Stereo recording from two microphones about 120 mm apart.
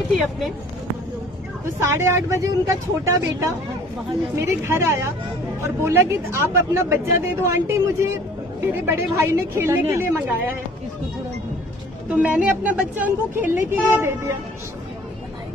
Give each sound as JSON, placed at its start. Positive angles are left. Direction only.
{"t": 1.8, "sound": "speech", "side_deg": -20}
{"t": 8.7, "sound": "speech", "side_deg": -20}
{"t": 12.1, "sound": "a woman's voice", "side_deg": -10}